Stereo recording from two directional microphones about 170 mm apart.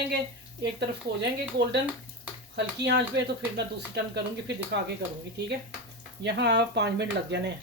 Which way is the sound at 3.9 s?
80° right.